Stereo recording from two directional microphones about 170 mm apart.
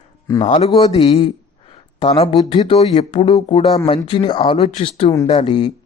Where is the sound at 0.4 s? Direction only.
45° left (ahead or behind).